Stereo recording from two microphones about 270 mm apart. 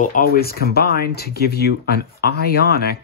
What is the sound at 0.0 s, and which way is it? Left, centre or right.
Speech, left.